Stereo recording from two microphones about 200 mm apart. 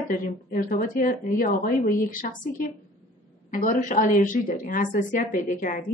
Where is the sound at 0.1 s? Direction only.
40° left (ahead or behind).